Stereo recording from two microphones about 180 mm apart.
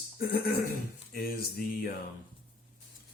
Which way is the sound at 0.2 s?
55° left (ahead or behind).